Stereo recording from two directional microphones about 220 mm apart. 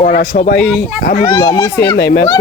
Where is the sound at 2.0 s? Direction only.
55° left (ahead or behind).